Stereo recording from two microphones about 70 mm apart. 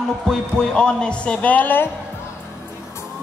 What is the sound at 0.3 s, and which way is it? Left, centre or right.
A woman's voice, centre.